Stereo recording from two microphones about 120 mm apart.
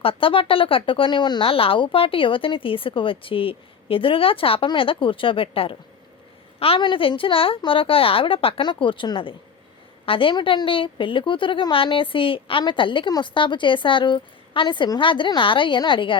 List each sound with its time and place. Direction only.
0.0 s a woman's voice: 50° left (ahead or behind)
6.8 s speech: 40° left (ahead or behind)